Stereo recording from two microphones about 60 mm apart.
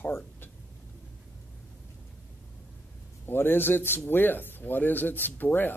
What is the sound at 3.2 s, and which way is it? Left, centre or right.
Speech, left.